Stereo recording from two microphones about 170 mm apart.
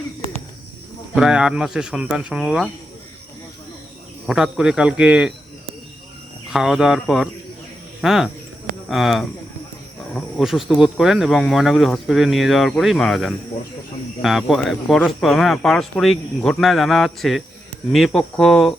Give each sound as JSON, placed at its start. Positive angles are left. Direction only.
{"t": 1.1, "sound": "speech", "side_deg": -5}
{"t": 4.3, "sound": "speech", "side_deg": -5}
{"t": 6.5, "sound": "speech", "side_deg": -5}